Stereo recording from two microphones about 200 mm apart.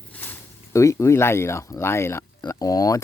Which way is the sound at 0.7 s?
15° left (ahead or behind).